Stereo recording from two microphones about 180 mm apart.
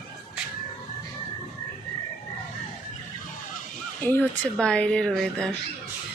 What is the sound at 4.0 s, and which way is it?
A woman's voice, 10° left (ahead or behind).